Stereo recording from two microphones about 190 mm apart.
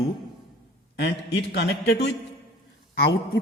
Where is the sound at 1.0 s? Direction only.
65° left (ahead or behind).